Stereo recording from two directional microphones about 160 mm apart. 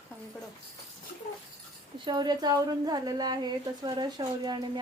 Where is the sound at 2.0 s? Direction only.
25° right (ahead or behind).